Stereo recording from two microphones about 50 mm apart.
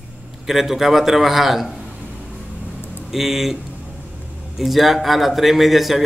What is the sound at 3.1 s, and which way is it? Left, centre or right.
A man's voice, centre.